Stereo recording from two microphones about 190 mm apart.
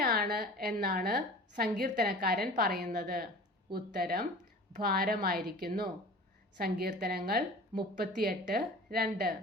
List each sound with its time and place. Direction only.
0.0 s a woman's voice: 50° right (ahead or behind)